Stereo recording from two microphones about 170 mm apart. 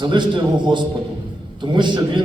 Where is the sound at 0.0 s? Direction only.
25° right (ahead or behind).